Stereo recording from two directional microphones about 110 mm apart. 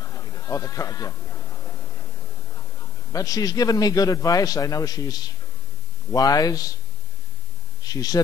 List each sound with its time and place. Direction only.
0.0 s bleat: 35° left (ahead or behind)
3.1 s a man's voice: 30° left (ahead or behind)
7.8 s speech: 35° left (ahead or behind)